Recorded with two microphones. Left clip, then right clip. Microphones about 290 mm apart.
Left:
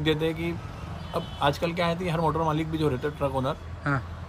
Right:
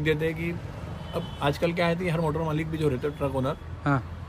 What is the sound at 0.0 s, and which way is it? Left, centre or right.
Speech, centre.